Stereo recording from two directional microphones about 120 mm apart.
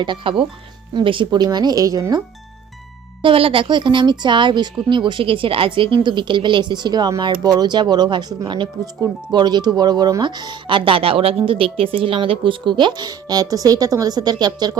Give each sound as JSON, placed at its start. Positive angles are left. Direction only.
{"t": 0.0, "sound": "speech", "side_deg": -40}
{"t": 3.2, "sound": "speech", "side_deg": -50}